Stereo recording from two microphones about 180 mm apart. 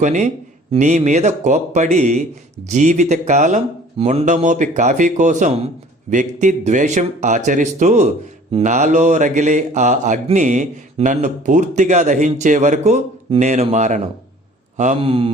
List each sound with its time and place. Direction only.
0.0 s a man's voice: 45° right (ahead or behind)